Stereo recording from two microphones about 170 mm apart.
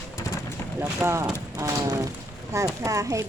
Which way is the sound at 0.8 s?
15° right (ahead or behind).